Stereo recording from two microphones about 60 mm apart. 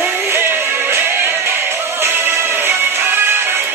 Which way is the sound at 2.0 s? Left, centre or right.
Right.